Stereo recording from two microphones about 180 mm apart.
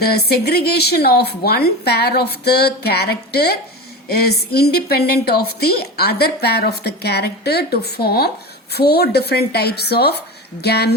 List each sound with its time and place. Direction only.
0.0 s a woman's voice: 60° left (ahead or behind)